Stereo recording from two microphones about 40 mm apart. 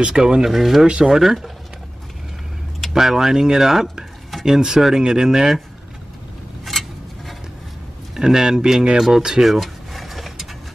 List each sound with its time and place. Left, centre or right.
0.1 s speech: centre
0.8 s speech: centre
2.9 s speech: centre
6.6 s a sound: centre
8.2 s speech: centre
9.4 s a sound: centre